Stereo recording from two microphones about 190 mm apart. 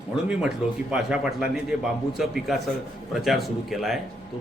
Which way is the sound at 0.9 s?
5° right (ahead or behind).